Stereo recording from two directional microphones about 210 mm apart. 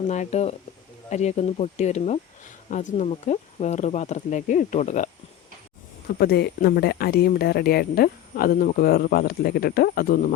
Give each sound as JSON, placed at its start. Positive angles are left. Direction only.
{"t": 0.1, "sound": "speech", "side_deg": 35}
{"t": 6.1, "sound": "speech", "side_deg": 50}